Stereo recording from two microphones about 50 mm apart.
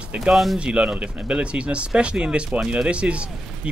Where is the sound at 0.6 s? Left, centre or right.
Centre.